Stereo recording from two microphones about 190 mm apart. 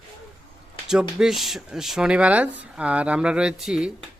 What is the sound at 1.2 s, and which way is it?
Speech, centre (ahead or behind).